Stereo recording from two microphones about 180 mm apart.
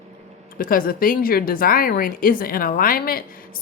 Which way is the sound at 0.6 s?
55° left (ahead or behind).